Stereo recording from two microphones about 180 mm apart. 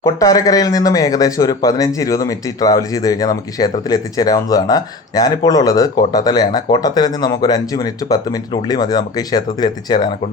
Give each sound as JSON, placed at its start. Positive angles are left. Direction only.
{"t": 0.0, "sound": "speech", "side_deg": 20}